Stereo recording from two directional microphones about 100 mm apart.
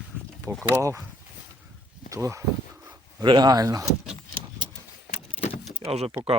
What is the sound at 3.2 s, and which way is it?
Speech, 45° right (ahead or behind).